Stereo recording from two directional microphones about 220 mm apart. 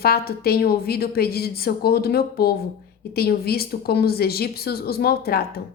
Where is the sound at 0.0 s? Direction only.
45° left (ahead or behind).